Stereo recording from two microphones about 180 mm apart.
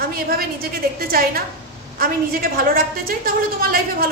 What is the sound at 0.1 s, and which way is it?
A woman's voice, 55° right (ahead or behind).